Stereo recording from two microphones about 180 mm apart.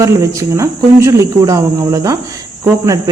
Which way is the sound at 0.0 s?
15° right (ahead or behind).